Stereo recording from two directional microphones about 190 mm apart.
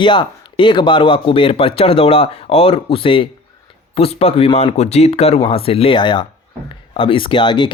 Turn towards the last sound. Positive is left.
turn(degrees=25)  # may be behind; listen again after turning